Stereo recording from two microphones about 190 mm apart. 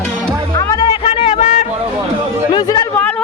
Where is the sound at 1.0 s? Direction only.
30° left (ahead or behind).